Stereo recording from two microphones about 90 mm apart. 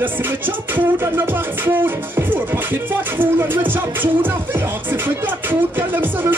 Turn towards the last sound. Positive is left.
turn(degrees=-25)  # may be behind; listen again after turning